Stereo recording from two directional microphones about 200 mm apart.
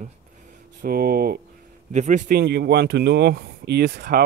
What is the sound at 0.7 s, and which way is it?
Speech, 50° right (ahead or behind).